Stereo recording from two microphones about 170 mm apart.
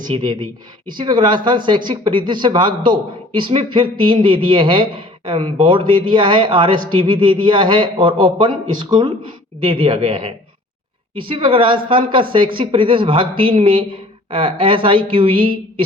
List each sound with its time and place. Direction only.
0.1 s a man's voice: 25° right (ahead or behind)